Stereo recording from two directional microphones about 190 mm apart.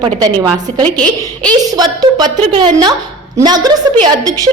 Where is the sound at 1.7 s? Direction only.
20° right (ahead or behind).